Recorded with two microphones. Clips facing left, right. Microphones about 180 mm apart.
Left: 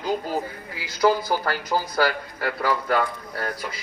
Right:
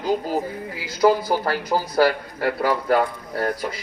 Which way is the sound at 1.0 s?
25° right (ahead or behind).